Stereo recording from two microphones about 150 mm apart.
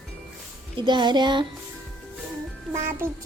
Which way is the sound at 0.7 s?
30° right (ahead or behind).